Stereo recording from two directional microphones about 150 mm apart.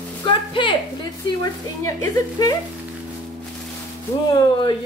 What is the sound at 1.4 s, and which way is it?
Speech, 20° left (ahead or behind).